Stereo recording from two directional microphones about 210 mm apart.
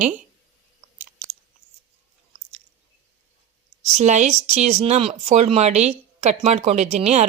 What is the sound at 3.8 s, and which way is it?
Speech, 30° right (ahead or behind).